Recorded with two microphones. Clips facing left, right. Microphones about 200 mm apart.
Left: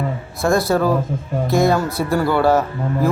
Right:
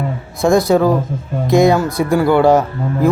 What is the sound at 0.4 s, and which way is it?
Speech, 15° right (ahead or behind).